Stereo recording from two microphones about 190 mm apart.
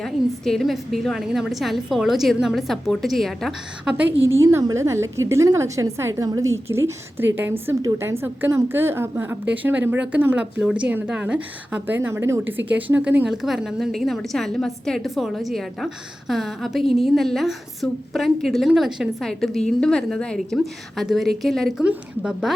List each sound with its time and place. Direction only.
0.0 s a woman's voice: centre (ahead or behind)